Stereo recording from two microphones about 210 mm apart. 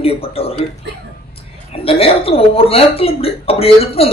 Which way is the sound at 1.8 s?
25° left (ahead or behind).